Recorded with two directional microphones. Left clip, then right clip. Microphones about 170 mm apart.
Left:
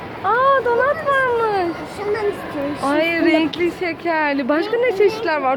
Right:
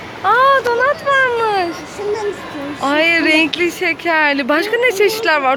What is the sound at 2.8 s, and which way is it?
Speech, 10° right (ahead or behind).